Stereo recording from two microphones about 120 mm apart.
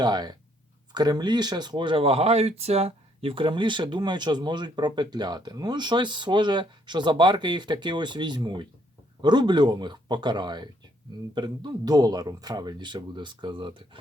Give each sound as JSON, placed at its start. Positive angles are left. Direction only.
{"t": 0.0, "sound": "speech", "side_deg": -35}